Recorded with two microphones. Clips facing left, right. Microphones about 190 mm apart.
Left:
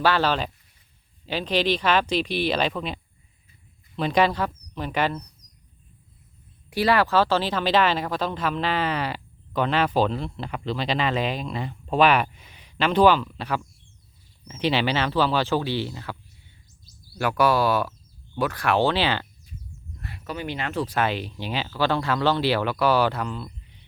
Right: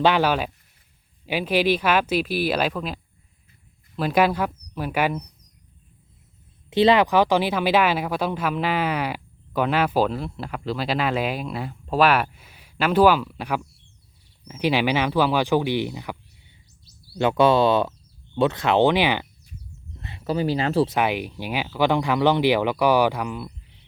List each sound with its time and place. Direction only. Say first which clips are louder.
0.0 s speech: right 3 dB; 15° right (ahead or behind)
6.7 s speech: right 4 dB; 20° right (ahead or behind)
17.2 s speech: right 4 dB; 25° right (ahead or behind)
20.0 s speech: right 8 dB; 25° right (ahead or behind)
20.9 s speech: right 2 dB; 15° right (ahead or behind)